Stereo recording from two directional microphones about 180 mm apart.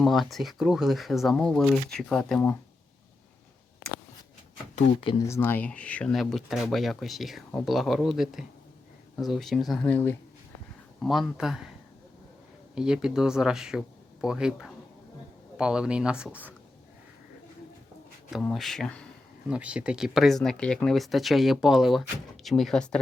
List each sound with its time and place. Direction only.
0.0 s speech: centre (ahead or behind)
4.7 s speech: 30° left (ahead or behind)
5.2 s speech: 15° left (ahead or behind); by 11.7 s centre (ahead or behind)
12.7 s speech: 5° right (ahead or behind)
18.3 s speech: centre (ahead or behind)
19.5 s speech: 5° right (ahead or behind)